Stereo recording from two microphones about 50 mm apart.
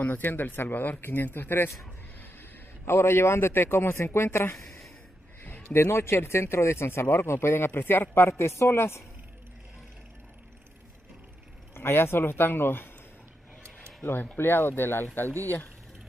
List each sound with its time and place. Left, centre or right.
0.0 s speech: left
2.8 s speech: left
4.6 s a sound: centre
5.7 s speech: left
11.7 s speech: left
14.3 s speech: left